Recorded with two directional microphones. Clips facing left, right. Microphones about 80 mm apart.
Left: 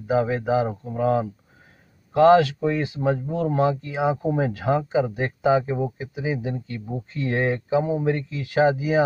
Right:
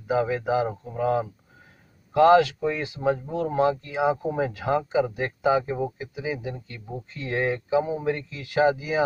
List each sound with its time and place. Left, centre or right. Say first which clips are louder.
0.0 s speech: left 2 dB; left